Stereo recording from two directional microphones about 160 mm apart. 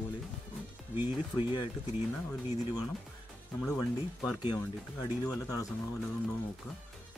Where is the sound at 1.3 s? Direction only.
20° left (ahead or behind).